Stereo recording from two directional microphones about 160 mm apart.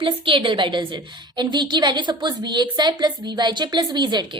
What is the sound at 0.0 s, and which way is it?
A woman's voice, 30° right (ahead or behind).